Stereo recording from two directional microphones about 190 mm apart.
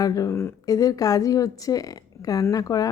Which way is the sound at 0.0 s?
20° left (ahead or behind).